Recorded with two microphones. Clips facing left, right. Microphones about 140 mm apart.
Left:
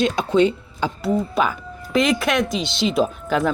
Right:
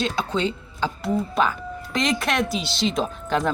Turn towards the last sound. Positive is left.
turn(degrees=5)  # may be behind; listen again after turning